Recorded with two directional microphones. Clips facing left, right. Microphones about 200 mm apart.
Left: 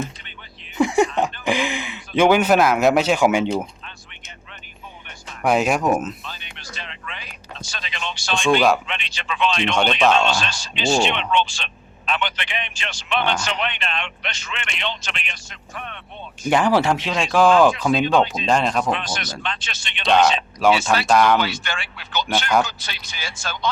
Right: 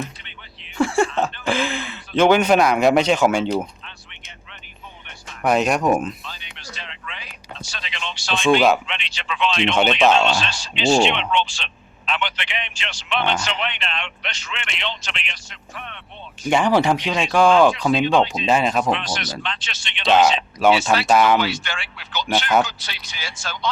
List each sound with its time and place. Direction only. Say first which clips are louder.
0.8 s speech: left 1 dB; 15° left (ahead or behind)
5.4 s speech: even; 5° left (ahead or behind)
6.2 s music: left 1 dB; 50° left (ahead or behind)
7.7 s speech: left 2 dB; 50° left (ahead or behind)
8.4 s speech: right 1 dB; centre (ahead or behind)
8.9 s speech: left 1 dB; 45° left (ahead or behind)
9.7 s speech: right 2 dB; 5° right (ahead or behind)
10.6 s speech: right 4 dB; 45° left (ahead or behind)
16.5 s speech: even; 5° left (ahead or behind)
18.9 s speech: right 1 dB; 50° left (ahead or behind)
20.1 s speech: right 1 dB; 5° right (ahead or behind)
21.4 s speech: right 1 dB; 50° left (ahead or behind)